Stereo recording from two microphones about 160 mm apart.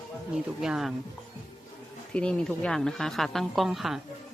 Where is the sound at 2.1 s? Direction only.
5° left (ahead or behind).